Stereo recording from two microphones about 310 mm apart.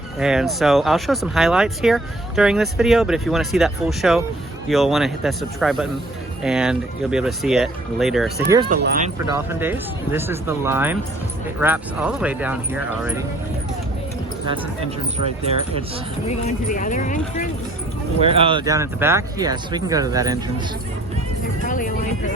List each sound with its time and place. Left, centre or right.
0.2 s speech: centre
8.7 s speech: right
9.3 s speech: centre
16.2 s speech: left
18.2 s speech: centre
21.7 s speech: left